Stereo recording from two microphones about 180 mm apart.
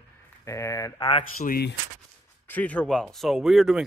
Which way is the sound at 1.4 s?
60° left (ahead or behind).